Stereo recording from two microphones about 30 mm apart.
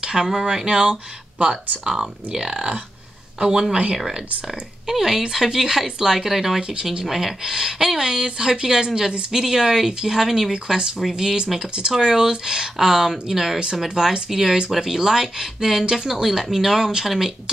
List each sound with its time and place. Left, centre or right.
0.2 s speech: centre
0.7 s speech: right
1.4 s speech: right
1.9 s speech: right
4.8 s speech: centre
6.7 s a woman's voice: right
7.1 s speech: centre
7.4 s a woman's voice: centre
13.8 s a woman's voice: right